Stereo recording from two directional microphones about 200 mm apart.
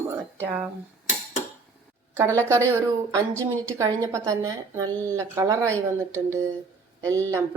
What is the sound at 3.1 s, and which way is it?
A woman's voice, 15° right (ahead or behind).